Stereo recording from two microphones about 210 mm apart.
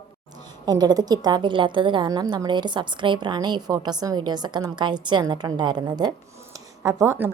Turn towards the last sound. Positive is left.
turn(degrees=-10)  # may be behind; listen again after turning